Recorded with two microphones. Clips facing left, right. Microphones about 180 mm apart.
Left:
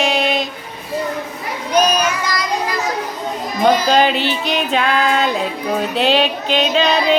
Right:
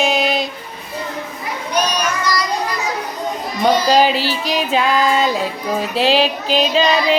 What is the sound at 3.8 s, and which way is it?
Music, centre (ahead or behind).